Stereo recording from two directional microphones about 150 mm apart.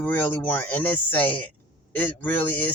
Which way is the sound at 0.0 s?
15° left (ahead or behind).